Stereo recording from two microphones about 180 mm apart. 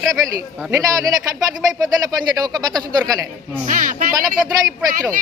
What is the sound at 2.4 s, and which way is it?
Speech, 20° right (ahead or behind).